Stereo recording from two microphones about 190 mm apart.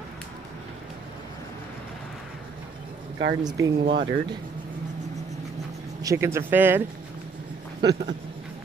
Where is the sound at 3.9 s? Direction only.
25° right (ahead or behind).